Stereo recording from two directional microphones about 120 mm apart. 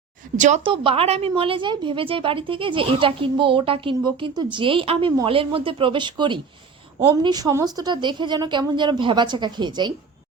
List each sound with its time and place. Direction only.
0.3 s a woman's voice: 80° right
0.6 s a woman's voice: 50° right (ahead or behind)